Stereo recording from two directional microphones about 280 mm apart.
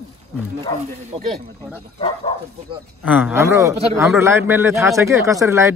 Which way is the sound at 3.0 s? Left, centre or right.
Centre.